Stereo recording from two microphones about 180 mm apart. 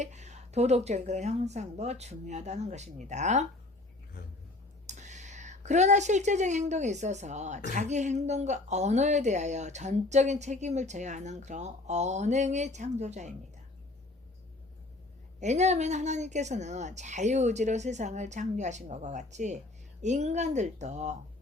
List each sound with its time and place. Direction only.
0.0 s speech: 40° right (ahead or behind)
4.9 s speech: 40° right (ahead or behind)
15.4 s speech: 40° right (ahead or behind)